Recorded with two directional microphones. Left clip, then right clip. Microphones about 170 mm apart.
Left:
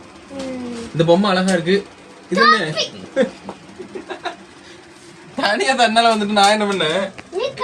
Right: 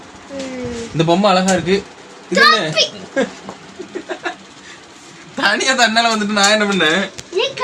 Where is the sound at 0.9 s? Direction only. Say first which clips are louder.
Right 2 dB; 20° right (ahead or behind).